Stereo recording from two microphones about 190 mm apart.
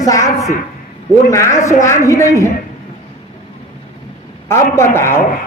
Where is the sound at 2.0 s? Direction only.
15° left (ahead or behind).